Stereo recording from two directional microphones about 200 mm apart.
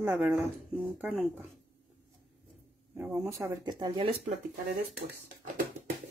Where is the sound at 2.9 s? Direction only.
10° right (ahead or behind).